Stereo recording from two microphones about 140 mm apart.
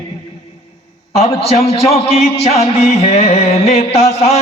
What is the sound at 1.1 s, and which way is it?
A man's voice, 45° left (ahead or behind).